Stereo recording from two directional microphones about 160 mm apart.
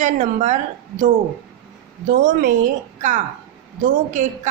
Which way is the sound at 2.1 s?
60° right (ahead or behind).